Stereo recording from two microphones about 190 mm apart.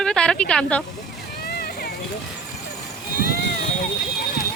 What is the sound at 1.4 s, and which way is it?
Vehicle, 55° left (ahead or behind).